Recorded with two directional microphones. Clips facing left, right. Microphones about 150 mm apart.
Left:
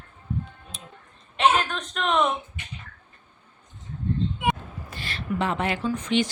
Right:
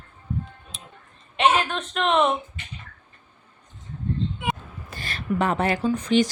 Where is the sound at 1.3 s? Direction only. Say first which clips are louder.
Right 1 dB; centre (ahead or behind).